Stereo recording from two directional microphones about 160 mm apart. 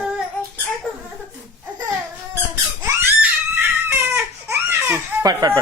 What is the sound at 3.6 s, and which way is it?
Baby cry, 15° right (ahead or behind).